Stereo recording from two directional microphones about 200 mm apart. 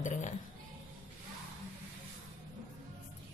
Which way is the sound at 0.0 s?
35° left (ahead or behind).